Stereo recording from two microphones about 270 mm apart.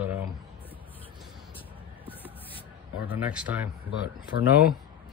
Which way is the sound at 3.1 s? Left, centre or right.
Centre.